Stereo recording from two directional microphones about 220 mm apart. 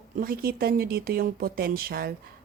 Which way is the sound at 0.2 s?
40° right (ahead or behind).